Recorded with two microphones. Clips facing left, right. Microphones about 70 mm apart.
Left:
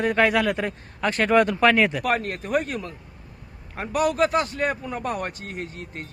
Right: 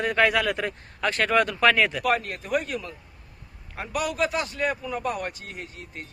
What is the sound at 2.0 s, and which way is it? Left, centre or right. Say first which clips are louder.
A man's voice: left 1 dB; left.